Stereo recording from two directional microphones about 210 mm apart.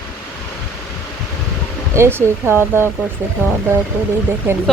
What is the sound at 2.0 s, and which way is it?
Speech, 10° right (ahead or behind).